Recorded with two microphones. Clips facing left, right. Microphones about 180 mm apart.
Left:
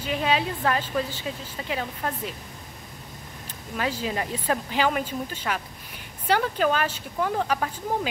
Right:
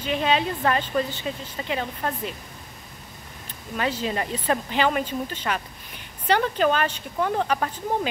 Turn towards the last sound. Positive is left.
turn(degrees=10)  # may be behind; listen again after turning